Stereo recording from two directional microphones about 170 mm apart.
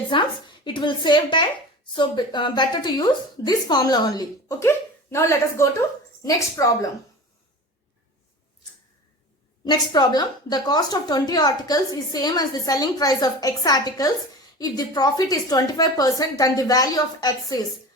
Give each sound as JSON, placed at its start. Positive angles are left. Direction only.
{"t": 0.1, "sound": "a woman's voice", "side_deg": 30}
{"t": 9.6, "sound": "speech", "side_deg": 25}